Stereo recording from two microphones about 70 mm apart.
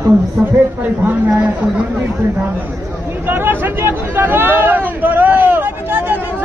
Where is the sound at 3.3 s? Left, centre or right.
Right.